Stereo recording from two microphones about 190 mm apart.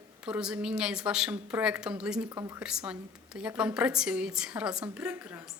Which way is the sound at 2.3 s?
15° right (ahead or behind).